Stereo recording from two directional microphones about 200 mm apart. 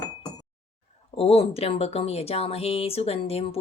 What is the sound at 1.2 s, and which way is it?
Speech, 30° left (ahead or behind).